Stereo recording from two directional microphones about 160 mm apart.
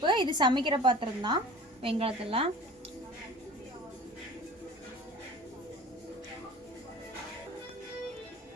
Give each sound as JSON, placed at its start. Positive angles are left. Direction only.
{"t": 0.0, "sound": "a woman's voice", "side_deg": -30}